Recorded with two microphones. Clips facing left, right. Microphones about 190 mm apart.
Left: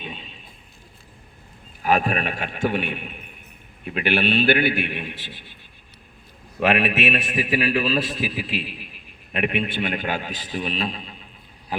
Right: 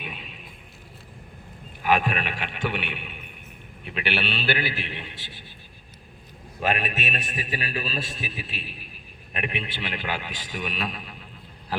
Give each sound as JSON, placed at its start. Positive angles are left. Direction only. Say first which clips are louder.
{"t": 0.0, "sound": "music", "louder": "left 2 dB", "side_deg": 30}
{"t": 1.8, "sound": "a man's voice", "louder": "left 2 dB", "side_deg": 40}
{"t": 6.6, "sound": "a man's voice", "louder": "left 7 dB", "side_deg": 75}
{"t": 9.3, "sound": "a man's voice", "louder": "left 8 dB", "side_deg": 60}